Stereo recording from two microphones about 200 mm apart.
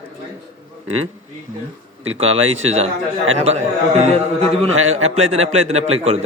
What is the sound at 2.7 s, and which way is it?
A man's voice, 30° right (ahead or behind).